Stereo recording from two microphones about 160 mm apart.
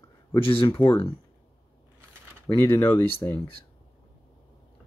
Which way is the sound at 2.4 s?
15° left (ahead or behind).